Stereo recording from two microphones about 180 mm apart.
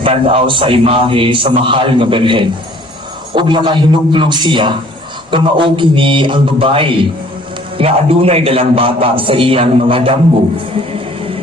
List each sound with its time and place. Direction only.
0.0 s a man's voice: 30° right (ahead or behind)